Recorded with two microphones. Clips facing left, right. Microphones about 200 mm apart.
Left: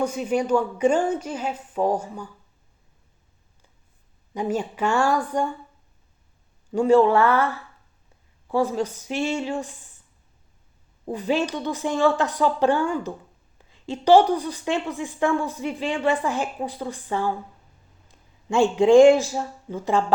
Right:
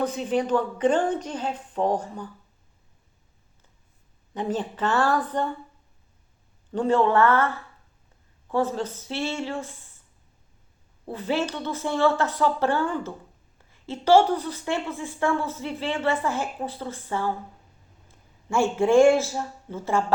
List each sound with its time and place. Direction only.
0.0 s a woman's voice: 10° left (ahead or behind)
4.4 s a woman's voice: 10° left (ahead or behind)
6.7 s a woman's voice: 10° left (ahead or behind)
11.0 s a woman's voice: 15° left (ahead or behind)
18.4 s a woman's voice: 15° left (ahead or behind)